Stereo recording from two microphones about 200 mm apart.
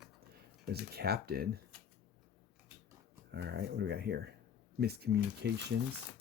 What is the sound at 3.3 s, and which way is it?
Speech, 55° right (ahead or behind).